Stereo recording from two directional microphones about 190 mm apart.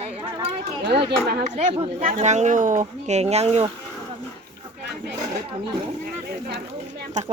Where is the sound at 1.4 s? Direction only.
30° right (ahead or behind).